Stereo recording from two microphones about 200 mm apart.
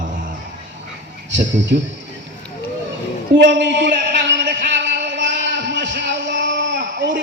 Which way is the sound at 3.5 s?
65° right (ahead or behind).